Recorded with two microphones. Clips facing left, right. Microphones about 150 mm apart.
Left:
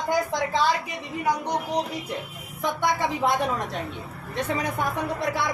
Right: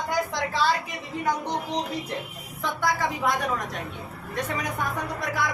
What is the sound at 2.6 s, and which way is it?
Speech, 25° left (ahead or behind).